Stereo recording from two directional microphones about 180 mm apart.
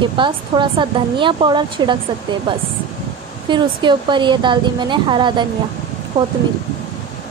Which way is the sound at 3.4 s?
25° right (ahead or behind).